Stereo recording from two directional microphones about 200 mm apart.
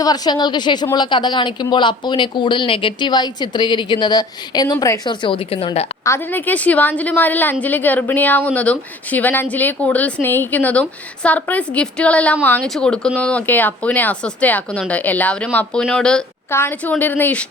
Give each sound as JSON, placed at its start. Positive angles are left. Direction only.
{"t": 0.0, "sound": "speech", "side_deg": 20}
{"t": 6.1, "sound": "a woman's voice", "side_deg": 10}